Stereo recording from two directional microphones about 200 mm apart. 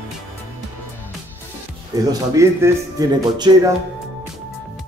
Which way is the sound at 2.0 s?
15° right (ahead or behind).